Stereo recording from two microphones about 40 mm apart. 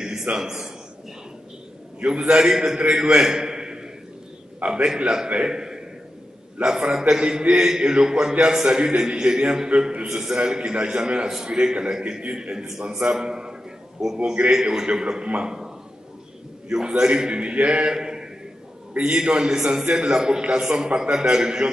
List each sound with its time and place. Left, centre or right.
0.0 s a sound: centre
2.0 s a man's voice: right
4.6 s a man's voice: right
4.8 s a man's voice: right
16.6 s a man's voice: centre
17.9 s a sound: centre
18.9 s a man's voice: right